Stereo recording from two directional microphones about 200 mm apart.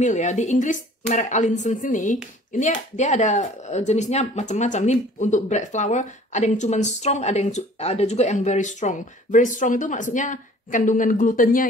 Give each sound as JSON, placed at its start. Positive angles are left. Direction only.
{"t": 0.0, "sound": "speech", "side_deg": 35}